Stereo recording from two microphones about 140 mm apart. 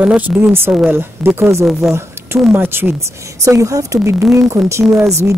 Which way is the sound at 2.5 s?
15° right (ahead or behind).